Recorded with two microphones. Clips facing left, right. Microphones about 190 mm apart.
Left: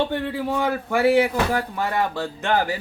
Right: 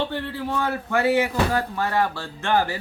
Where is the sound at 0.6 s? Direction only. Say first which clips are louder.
Left 3 dB; 10° left (ahead or behind).